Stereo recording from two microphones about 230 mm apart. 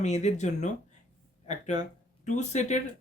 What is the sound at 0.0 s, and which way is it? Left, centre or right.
Speech, left.